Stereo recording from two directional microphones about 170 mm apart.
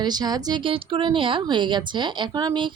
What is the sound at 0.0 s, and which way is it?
A woman's voice, 25° right (ahead or behind).